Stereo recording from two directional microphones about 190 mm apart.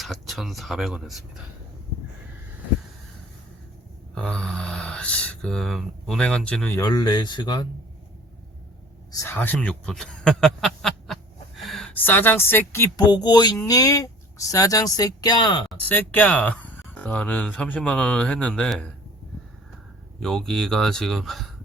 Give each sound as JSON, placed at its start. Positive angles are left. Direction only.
{"t": 0.0, "sound": "speech", "side_deg": 0}
{"t": 4.1, "sound": "speech", "side_deg": 5}
{"t": 9.2, "sound": "speech", "side_deg": 10}
{"t": 15.8, "sound": "speech", "side_deg": 10}
{"t": 20.1, "sound": "speech", "side_deg": 0}